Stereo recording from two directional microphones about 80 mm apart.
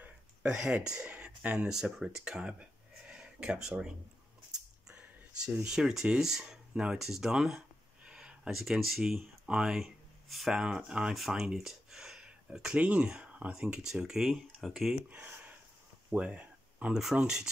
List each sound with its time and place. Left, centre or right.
0.0 s speech: centre
3.1 s a sound: centre
4.8 s speech: centre
10.5 s speech: centre
15.0 s speech: right
16.1 s a sound: centre
17.0 s speech: centre